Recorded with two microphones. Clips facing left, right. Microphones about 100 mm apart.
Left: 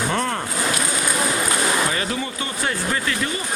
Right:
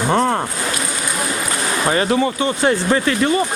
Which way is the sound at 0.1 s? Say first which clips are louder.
Right 11 dB; 30° right (ahead or behind).